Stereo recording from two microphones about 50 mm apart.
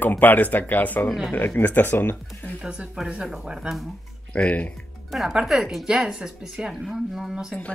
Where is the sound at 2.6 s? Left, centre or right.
Centre.